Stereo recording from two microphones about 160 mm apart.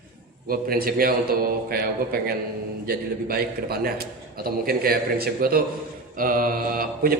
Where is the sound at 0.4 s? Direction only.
65° right (ahead or behind).